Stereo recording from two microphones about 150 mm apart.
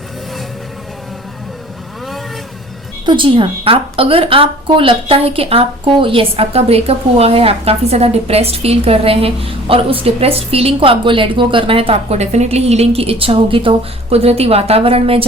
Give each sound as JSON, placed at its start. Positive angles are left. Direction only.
{"t": 3.1, "sound": "a woman's voice", "side_deg": -35}